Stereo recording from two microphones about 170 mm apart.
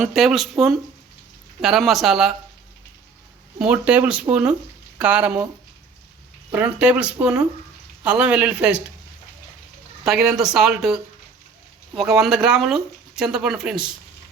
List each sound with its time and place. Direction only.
0.0 s speech: centre (ahead or behind)
3.6 s speech: 5° right (ahead or behind)
6.5 s speech: 10° right (ahead or behind)
10.0 s speech: centre (ahead or behind)
11.9 s speech: centre (ahead or behind)